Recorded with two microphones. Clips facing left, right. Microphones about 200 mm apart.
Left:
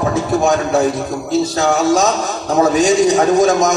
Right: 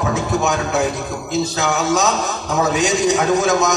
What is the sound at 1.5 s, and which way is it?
A man's voice, 30° left (ahead or behind).